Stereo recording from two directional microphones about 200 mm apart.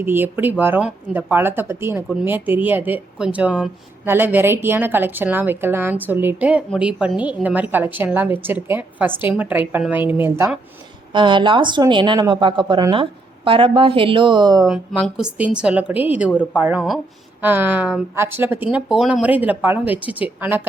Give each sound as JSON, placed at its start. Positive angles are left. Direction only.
{"t": 0.0, "sound": "a woman's voice", "side_deg": -10}
{"t": 11.1, "sound": "speech", "side_deg": -25}
{"t": 14.7, "sound": "a woman's voice", "side_deg": -5}
{"t": 16.3, "sound": "a woman's voice", "side_deg": 5}
{"t": 16.6, "sound": "a woman's voice", "side_deg": -5}